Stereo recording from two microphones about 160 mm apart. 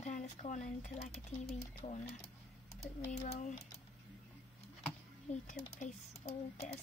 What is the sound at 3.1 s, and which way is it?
Speech, 45° left (ahead or behind).